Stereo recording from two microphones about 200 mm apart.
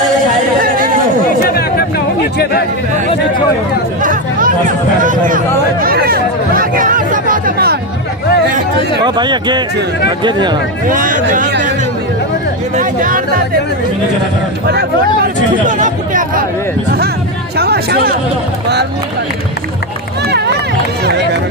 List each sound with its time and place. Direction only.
1.5 s chatter: 50° left (ahead or behind)
4.0 s speech: 45° right (ahead or behind)
9.0 s speech: 20° right (ahead or behind)
10.9 s speech: 45° right (ahead or behind)
12.7 s speech: 45° right (ahead or behind)
15.6 s speech: 40° right (ahead or behind)
17.6 s speech: 50° right (ahead or behind)
20.2 s run: 55° right (ahead or behind)